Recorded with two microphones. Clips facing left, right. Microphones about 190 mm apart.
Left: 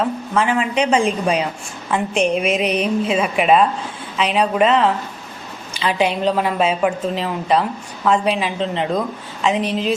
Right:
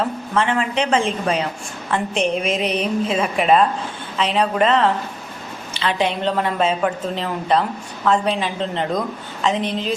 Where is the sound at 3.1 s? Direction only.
5° left (ahead or behind).